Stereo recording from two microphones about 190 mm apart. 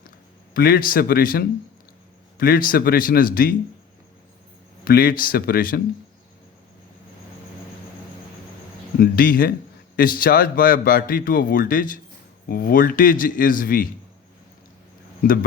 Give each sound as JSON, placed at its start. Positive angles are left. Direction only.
{"t": 0.5, "sound": "a man's voice", "side_deg": 50}
{"t": 4.9, "sound": "a man's voice", "side_deg": 50}
{"t": 9.0, "sound": "a man's voice", "side_deg": 50}